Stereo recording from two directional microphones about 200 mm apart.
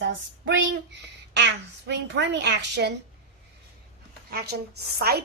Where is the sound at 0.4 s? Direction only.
60° right (ahead or behind).